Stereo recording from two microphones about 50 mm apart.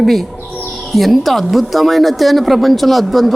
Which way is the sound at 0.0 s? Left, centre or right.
Centre.